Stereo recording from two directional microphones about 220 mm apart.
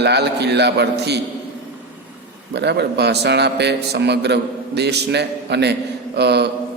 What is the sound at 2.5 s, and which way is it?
A man's voice, 50° right (ahead or behind).